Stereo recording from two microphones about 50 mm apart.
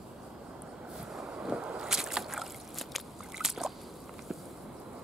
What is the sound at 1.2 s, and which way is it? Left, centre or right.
Boat, centre.